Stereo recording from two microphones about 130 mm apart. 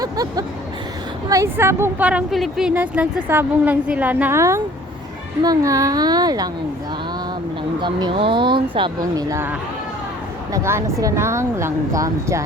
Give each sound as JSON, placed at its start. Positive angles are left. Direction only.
{"t": 0.0, "sound": "a woman's voice", "side_deg": -30}
{"t": 7.8, "sound": "speech", "side_deg": -35}
{"t": 9.3, "sound": "a woman's voice", "side_deg": -15}